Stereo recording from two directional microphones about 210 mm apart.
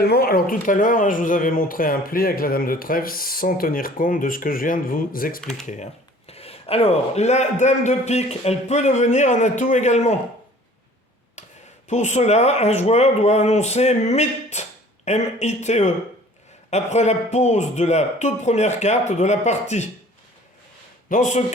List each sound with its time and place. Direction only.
0.0 s speech: 45° left (ahead or behind)
11.4 s a sound: 35° left (ahead or behind)
11.9 s speech: 35° left (ahead or behind)
21.1 s speech: 35° left (ahead or behind)